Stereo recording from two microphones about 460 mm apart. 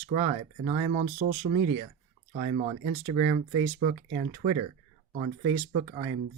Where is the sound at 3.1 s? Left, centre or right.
Centre.